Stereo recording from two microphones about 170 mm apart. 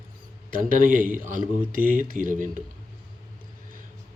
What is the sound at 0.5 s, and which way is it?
A man's voice, 55° right (ahead or behind).